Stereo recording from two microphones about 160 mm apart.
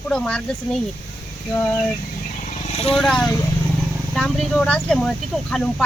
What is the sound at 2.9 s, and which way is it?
Speech, 5° left (ahead or behind).